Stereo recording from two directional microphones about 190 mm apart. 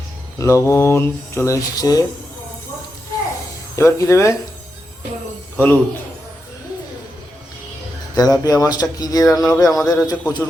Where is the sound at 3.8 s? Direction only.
15° left (ahead or behind).